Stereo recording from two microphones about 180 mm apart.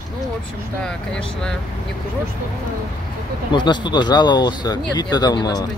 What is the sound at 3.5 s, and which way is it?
Speech, 25° left (ahead or behind).